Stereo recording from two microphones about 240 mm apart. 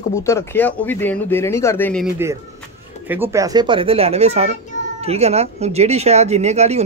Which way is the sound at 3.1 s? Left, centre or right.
Centre.